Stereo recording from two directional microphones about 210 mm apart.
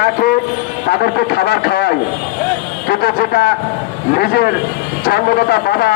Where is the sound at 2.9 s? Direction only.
50° left (ahead or behind).